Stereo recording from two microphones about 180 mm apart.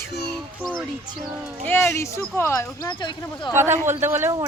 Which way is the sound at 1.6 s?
15° left (ahead or behind).